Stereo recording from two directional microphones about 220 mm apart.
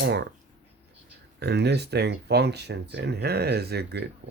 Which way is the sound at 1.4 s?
50° right (ahead or behind).